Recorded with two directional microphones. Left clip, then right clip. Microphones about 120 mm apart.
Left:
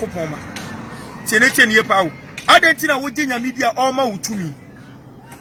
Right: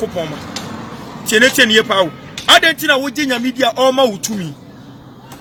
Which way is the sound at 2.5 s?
50° right (ahead or behind).